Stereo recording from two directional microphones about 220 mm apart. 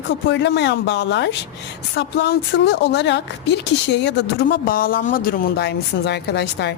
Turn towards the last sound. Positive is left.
turn(degrees=50)  # may be behind; listen again after turning